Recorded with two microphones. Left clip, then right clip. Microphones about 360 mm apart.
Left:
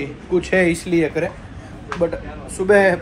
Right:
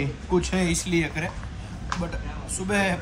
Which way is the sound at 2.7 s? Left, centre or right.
Centre.